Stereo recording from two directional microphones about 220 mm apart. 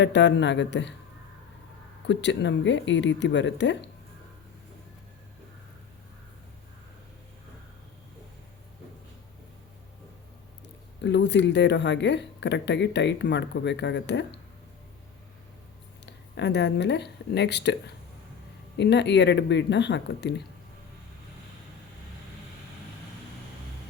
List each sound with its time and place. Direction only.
0.0 s speech: 55° left (ahead or behind)
2.0 s speech: 55° left (ahead or behind)
11.0 s speech: 50° left (ahead or behind)
16.0 s speech: 50° left (ahead or behind)